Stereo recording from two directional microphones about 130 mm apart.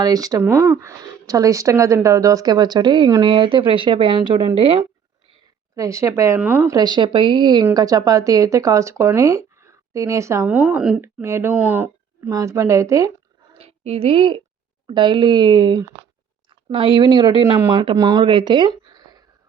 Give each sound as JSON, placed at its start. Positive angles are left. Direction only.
{"t": 0.0, "sound": "speech", "side_deg": -30}
{"t": 5.7, "sound": "speech", "side_deg": -25}
{"t": 6.4, "sound": "speech", "side_deg": -10}
{"t": 6.7, "sound": "speech", "side_deg": -30}
{"t": 10.4, "sound": "speech", "side_deg": -10}
{"t": 11.0, "sound": "speech", "side_deg": -20}
{"t": 13.5, "sound": "a sound", "side_deg": -50}
{"t": 14.8, "sound": "speech", "side_deg": -35}
{"t": 17.9, "sound": "speech", "side_deg": -30}